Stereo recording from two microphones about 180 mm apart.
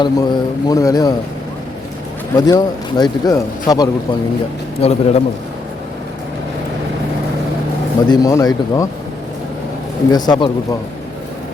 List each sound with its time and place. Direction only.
0.0 s speech: 20° left (ahead or behind)
2.3 s speech: 20° left (ahead or behind)
4.8 s a man's voice: 35° left (ahead or behind)
8.0 s speech: 20° left (ahead or behind)
10.1 s speech: 20° left (ahead or behind)